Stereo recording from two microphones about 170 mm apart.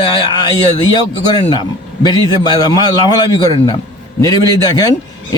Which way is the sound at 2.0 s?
25° left (ahead or behind).